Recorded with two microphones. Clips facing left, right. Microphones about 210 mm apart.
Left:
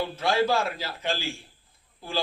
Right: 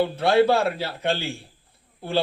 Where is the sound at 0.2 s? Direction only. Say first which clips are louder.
Right 5 dB; 65° right (ahead or behind).